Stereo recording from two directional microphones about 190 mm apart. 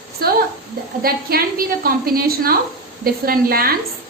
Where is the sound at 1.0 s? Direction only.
50° right (ahead or behind).